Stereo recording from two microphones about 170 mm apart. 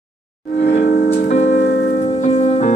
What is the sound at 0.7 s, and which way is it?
Music, 55° left (ahead or behind).